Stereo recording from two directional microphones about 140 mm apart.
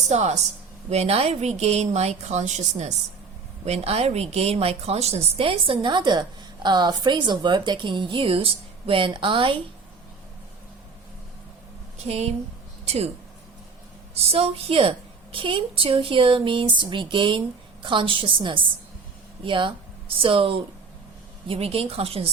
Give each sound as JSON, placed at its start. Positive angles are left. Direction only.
{"t": 0.1, "sound": "a woman's voice", "side_deg": -50}
{"t": 12.0, "sound": "a woman's voice", "side_deg": -50}
{"t": 14.2, "sound": "a woman's voice", "side_deg": -45}